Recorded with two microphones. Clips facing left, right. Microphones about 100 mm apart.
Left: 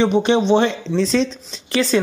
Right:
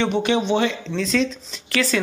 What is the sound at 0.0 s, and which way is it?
Speech, 25° left (ahead or behind).